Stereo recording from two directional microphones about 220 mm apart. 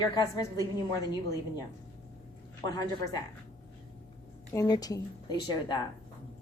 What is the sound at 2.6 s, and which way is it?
Speech, 20° left (ahead or behind).